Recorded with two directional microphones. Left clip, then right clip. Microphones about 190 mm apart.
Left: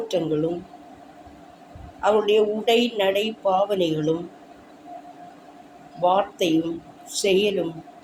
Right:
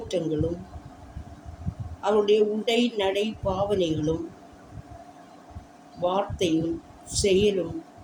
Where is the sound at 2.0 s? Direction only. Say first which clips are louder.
Left 2 dB; 20° right (ahead or behind).